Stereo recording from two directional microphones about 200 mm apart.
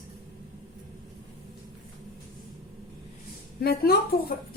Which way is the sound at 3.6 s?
50° left (ahead or behind).